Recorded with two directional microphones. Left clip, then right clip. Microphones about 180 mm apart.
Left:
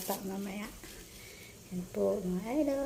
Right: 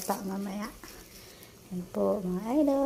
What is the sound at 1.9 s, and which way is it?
Speech, 10° right (ahead or behind).